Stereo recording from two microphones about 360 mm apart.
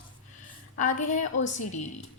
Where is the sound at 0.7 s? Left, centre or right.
Left.